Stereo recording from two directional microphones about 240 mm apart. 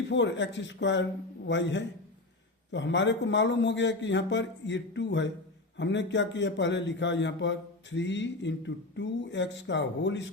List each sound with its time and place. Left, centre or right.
0.1 s a man's voice: left